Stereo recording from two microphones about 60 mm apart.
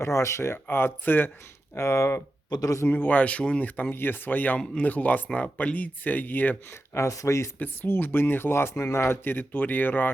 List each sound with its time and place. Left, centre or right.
0.0 s speech: left
0.5 s speech: left
1.7 s speech: left
2.6 s a man's voice: left
2.8 s speech: left
6.7 s speech: left
7.1 s speech: left
7.6 s speech: left
9.2 s speech: left